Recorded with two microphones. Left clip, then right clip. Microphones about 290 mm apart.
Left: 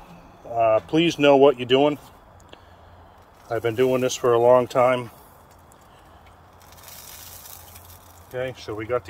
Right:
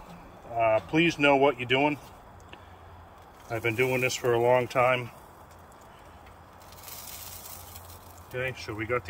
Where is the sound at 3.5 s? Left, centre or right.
Left.